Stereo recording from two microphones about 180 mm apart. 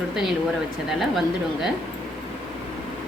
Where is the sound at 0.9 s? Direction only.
Centre (ahead or behind).